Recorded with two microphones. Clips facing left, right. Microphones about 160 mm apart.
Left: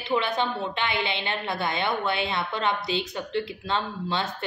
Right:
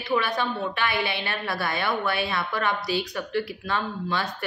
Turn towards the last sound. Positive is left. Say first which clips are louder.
# right 1 dB
turn(degrees=25)  # may be behind; listen again after turning